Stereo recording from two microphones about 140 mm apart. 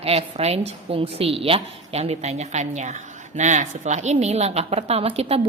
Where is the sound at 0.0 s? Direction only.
45° right (ahead or behind).